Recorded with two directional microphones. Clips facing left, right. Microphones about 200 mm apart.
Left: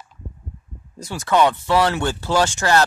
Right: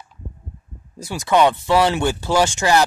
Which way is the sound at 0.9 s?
10° right (ahead or behind).